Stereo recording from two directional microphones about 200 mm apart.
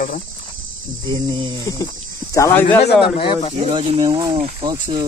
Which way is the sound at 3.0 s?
25° left (ahead or behind).